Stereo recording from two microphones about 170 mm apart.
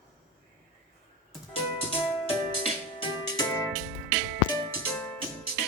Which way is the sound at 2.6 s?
30° left (ahead or behind).